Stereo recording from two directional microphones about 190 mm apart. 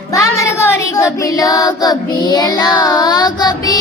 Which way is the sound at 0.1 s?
15° left (ahead or behind).